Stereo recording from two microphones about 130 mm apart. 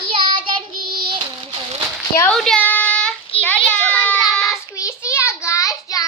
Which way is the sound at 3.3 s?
45° left (ahead or behind).